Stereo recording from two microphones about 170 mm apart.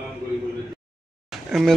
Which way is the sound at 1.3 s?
Centre (ahead or behind).